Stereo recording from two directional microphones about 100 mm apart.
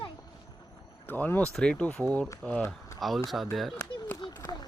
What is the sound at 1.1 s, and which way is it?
Speech, 15° left (ahead or behind).